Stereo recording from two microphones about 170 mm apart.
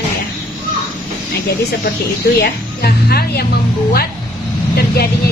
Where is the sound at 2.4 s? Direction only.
65° left (ahead or behind).